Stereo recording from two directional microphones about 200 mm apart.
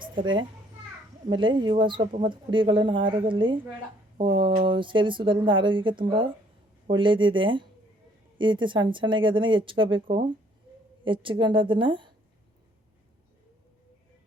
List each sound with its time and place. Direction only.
0.0 s a child's voice: 25° right (ahead or behind)